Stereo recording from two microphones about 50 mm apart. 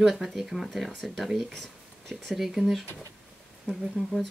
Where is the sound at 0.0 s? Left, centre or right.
Centre.